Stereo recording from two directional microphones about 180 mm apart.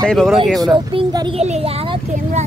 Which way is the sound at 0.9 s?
25° right (ahead or behind).